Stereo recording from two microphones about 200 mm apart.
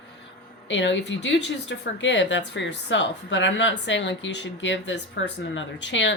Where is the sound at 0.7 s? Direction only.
65° left (ahead or behind).